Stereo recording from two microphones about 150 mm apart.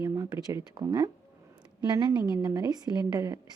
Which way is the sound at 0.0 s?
25° right (ahead or behind).